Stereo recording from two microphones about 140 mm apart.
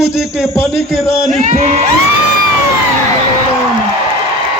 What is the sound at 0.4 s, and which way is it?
Speech, 15° left (ahead or behind).